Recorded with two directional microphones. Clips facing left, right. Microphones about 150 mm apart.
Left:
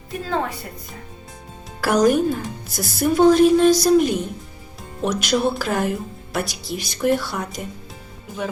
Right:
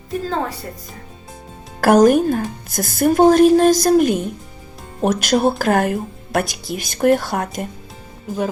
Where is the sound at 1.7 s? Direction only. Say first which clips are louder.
Right 5 dB; 50° right (ahead or behind).